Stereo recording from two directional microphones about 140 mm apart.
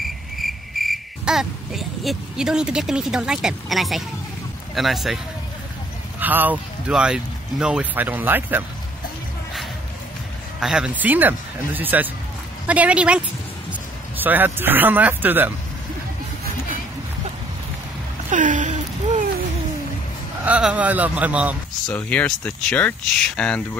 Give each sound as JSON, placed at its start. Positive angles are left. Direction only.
{"t": 0.0, "sound": "cricket", "side_deg": 0}
{"t": 4.7, "sound": "speech", "side_deg": 0}
{"t": 6.1, "sound": "speech", "side_deg": -10}
{"t": 10.6, "sound": "speech", "side_deg": -5}
{"t": 18.3, "sound": "a sound", "side_deg": -65}
{"t": 20.4, "sound": "speech", "side_deg": -10}
{"t": 21.8, "sound": "speech", "side_deg": 10}